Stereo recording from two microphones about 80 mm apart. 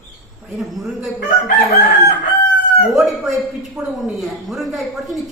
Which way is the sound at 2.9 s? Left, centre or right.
Centre.